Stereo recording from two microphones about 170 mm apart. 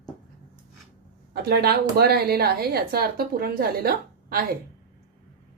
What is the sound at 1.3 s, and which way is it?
A woman's voice, 70° right (ahead or behind).